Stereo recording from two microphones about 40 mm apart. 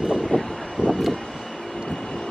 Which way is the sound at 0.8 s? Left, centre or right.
Left.